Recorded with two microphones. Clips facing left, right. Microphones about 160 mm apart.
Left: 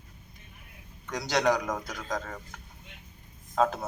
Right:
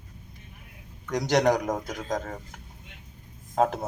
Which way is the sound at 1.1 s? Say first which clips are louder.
Right 4 dB; 45° right (ahead or behind).